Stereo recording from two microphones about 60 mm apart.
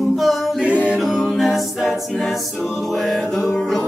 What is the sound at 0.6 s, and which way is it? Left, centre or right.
A capella, right.